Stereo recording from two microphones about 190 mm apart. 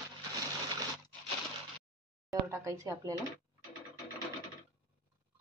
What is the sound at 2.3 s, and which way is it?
Speech, 15° right (ahead or behind).